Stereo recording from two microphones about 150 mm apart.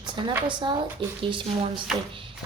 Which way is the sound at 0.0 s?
30° right (ahead or behind).